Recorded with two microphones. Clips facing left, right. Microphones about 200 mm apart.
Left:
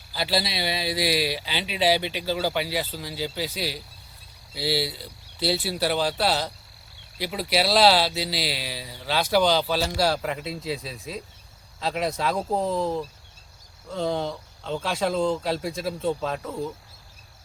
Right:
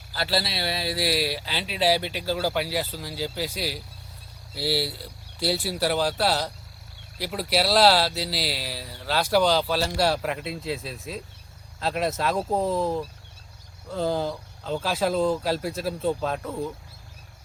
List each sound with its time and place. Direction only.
0.1 s a man's voice: centre (ahead or behind)